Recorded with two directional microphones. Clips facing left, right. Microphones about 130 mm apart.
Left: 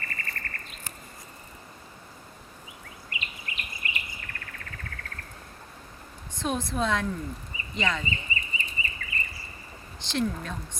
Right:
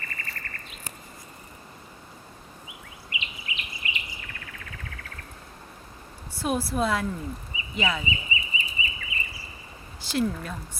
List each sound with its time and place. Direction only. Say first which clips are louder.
0.0 s bird: left 1 dB; 45° left (ahead or behind)
3.1 s bird: right 2 dB; 45° left (ahead or behind)
6.3 s a woman's voice: right 3 dB; 5° right (ahead or behind)
8.3 s bird: right 2 dB; 50° left (ahead or behind)
10.0 s speech: right 2 dB; 5° right (ahead or behind)